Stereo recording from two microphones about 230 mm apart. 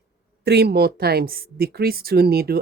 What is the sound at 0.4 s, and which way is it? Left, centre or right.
Speech, right.